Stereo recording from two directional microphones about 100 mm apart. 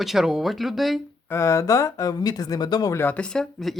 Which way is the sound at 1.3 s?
30° left (ahead or behind).